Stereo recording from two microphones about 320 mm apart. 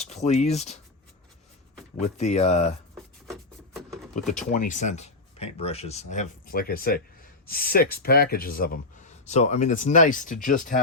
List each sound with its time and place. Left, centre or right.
0.0 s speech: centre
2.0 s speech: left
3.8 s a sound: centre
4.3 s speech: left